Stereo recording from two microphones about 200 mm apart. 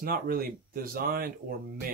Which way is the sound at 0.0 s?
45° right (ahead or behind).